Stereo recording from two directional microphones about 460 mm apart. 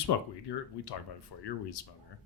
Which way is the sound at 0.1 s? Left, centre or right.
Left.